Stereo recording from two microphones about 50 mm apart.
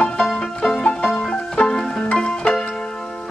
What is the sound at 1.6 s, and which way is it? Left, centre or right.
Music, centre.